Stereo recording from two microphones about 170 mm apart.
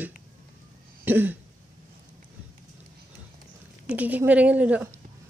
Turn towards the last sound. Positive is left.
turn(degrees=-10)  # may be behind; listen again after turning